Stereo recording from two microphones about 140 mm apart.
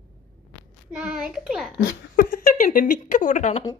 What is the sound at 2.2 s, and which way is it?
Speech, 80° left.